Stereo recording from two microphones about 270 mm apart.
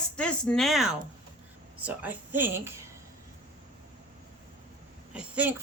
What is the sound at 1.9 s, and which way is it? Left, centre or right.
Speech, centre.